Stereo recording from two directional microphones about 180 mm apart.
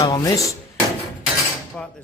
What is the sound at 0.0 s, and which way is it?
Dishes, 20° left (ahead or behind).